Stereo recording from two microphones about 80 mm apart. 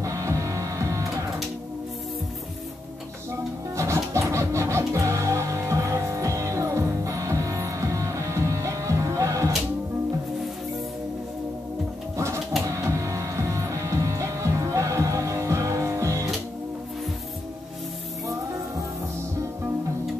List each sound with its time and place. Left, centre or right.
0.0 s music: right
3.7 s music: right
12.6 s music: right